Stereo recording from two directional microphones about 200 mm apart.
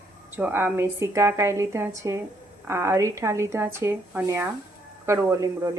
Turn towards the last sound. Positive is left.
turn(degrees=-15)  # may be behind; listen again after turning